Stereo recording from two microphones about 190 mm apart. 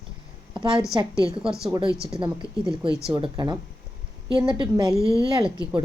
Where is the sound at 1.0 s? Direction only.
30° right (ahead or behind).